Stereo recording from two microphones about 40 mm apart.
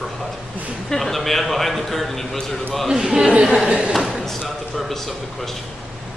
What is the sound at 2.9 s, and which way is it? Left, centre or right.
Speech, centre.